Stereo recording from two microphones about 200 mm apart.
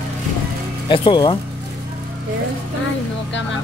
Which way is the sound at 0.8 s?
25° left (ahead or behind).